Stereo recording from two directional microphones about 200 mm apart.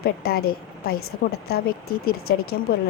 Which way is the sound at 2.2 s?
90° left.